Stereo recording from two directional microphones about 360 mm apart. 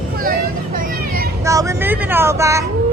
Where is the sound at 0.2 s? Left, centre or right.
Right.